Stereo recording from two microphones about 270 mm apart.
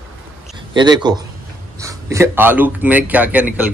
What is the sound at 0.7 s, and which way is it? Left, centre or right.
A man's voice, centre.